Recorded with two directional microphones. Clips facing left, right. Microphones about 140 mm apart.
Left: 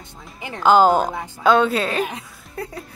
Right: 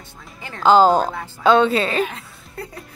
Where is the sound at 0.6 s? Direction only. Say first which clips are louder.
Right 1 dB; 5° left (ahead or behind).